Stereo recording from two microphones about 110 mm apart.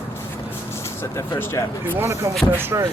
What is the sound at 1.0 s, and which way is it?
Speech, 20° left (ahead or behind).